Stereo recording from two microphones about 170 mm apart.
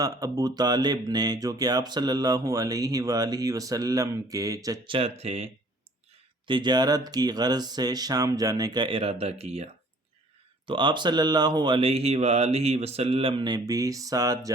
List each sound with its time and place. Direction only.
0.0 s speech: 20° right (ahead or behind)
4.9 s speech: 35° right (ahead or behind)
6.5 s speech: 25° right (ahead or behind)
10.7 s speech: 30° right (ahead or behind)